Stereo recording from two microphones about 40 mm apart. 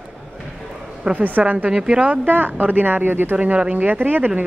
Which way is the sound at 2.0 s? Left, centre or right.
Right.